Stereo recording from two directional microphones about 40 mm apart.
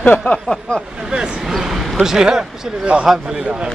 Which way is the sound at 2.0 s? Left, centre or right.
Centre.